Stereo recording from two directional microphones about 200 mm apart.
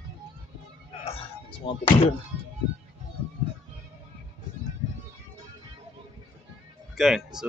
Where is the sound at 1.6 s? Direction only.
25° left (ahead or behind).